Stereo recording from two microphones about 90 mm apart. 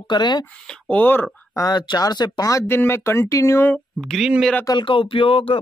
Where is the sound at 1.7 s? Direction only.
50° left (ahead or behind).